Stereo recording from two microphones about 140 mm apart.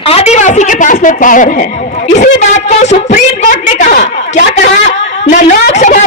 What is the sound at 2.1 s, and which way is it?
A woman's voice, 55° left (ahead or behind).